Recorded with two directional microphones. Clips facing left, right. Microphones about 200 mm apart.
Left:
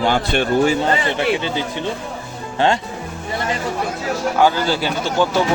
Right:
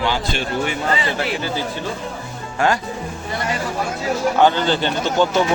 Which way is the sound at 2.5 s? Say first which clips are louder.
Left 2 dB; 25° left (ahead or behind).